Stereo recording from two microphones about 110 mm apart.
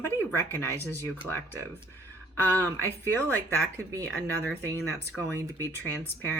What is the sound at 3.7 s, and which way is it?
Speech, 30° right (ahead or behind).